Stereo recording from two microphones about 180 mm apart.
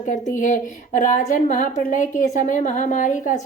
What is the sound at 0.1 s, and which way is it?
A woman's voice, 45° left (ahead or behind).